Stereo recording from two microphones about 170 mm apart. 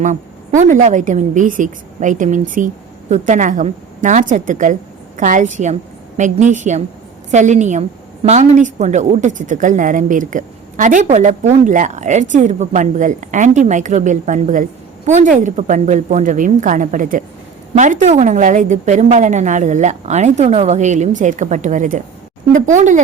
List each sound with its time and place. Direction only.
0.0 s a woman's voice: 45° right (ahead or behind)